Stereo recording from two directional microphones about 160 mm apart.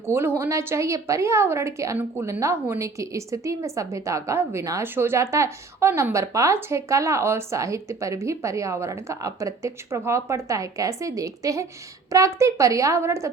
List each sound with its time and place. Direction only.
0.0 s a woman's voice: 15° right (ahead or behind)